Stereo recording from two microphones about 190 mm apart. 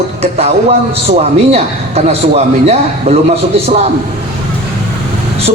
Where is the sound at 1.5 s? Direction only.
35° right (ahead or behind).